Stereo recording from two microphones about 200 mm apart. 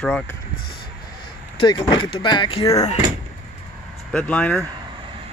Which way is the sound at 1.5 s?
25° left (ahead or behind).